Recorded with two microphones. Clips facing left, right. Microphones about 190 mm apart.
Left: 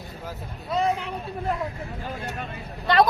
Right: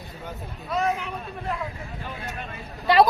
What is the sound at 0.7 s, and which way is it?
Speech, 30° left (ahead or behind).